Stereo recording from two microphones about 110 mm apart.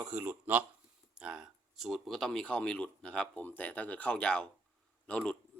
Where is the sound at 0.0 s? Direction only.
15° right (ahead or behind).